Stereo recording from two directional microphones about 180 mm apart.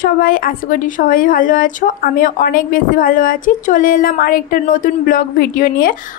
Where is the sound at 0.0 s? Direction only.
50° left (ahead or behind).